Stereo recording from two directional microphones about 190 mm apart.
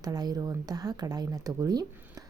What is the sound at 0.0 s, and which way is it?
Speech, 20° right (ahead or behind).